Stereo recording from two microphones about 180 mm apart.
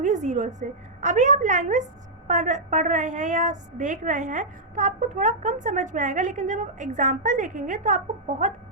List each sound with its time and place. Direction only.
0.0 s a woman's voice: 45° right (ahead or behind)